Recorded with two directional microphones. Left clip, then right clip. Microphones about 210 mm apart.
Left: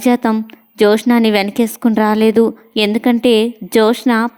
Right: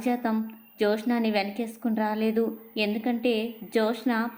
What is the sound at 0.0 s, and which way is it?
A woman's voice, 45° left (ahead or behind).